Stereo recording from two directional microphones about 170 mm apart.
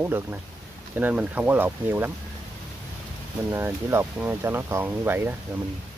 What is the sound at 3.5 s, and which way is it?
Speech, 15° right (ahead or behind).